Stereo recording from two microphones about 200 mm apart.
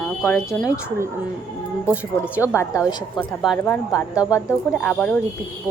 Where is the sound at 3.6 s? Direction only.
15° left (ahead or behind).